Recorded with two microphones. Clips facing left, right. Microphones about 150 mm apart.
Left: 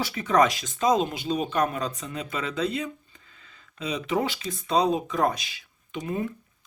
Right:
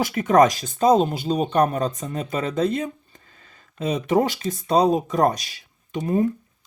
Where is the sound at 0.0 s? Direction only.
45° right (ahead or behind).